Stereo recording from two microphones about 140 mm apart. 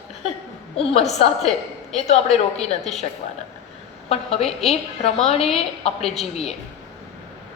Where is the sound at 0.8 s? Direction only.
50° left (ahead or behind).